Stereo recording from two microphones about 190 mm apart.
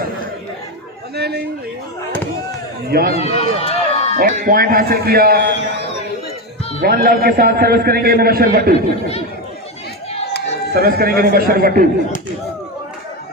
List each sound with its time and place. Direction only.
1.1 s a man's voice: 60° right (ahead or behind)
2.9 s a man's voice: 55° right (ahead or behind)
3.2 s speech: 35° left (ahead or behind)
4.2 s a man's voice: 50° right (ahead or behind)
6.8 s a man's voice: 50° right (ahead or behind)
10.8 s a man's voice: 50° right (ahead or behind)